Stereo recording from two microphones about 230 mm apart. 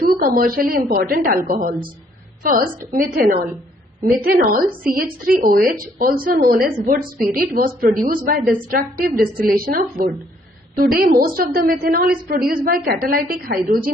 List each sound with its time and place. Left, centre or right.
0.0 s a woman's voice: right